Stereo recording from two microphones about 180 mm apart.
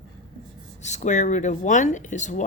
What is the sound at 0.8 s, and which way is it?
Speech, 40° left (ahead or behind).